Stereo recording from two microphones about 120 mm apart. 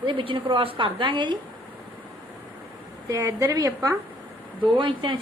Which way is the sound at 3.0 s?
25° right (ahead or behind).